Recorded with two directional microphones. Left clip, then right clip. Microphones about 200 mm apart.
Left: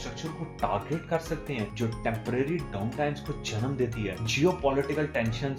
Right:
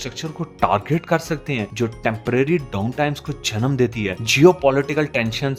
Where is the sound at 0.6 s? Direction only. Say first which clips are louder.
Right 11 dB; 55° right (ahead or behind).